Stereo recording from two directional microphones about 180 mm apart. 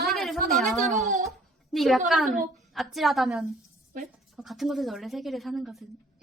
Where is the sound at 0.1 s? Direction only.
Centre (ahead or behind).